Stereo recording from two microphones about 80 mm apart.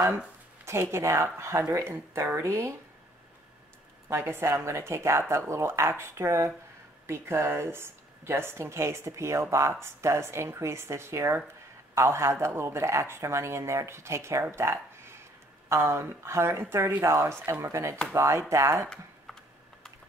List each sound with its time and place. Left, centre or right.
0.7 s speech: right
4.1 s speech: right